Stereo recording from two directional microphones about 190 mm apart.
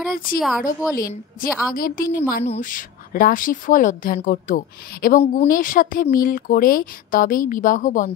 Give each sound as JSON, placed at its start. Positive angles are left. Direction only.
{"t": 0.4, "sound": "speech", "side_deg": 0}
{"t": 0.9, "sound": "a woman's voice", "side_deg": 50}
{"t": 2.4, "sound": "a woman's voice", "side_deg": 40}